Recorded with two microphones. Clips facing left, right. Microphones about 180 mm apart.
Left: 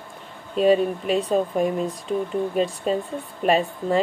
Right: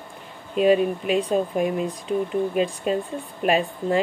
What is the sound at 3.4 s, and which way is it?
Speech, 35° left (ahead or behind).